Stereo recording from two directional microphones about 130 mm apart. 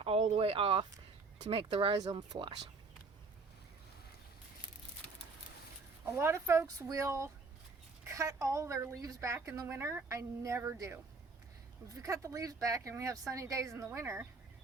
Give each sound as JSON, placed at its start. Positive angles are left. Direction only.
{"t": 0.0, "sound": "speech", "side_deg": -50}
{"t": 2.0, "sound": "speech", "side_deg": -30}
{"t": 6.1, "sound": "a woman's voice", "side_deg": -20}
{"t": 12.0, "sound": "a woman's voice", "side_deg": -25}